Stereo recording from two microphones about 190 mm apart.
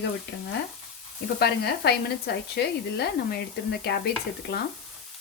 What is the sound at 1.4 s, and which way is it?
A woman's voice, 60° left (ahead or behind).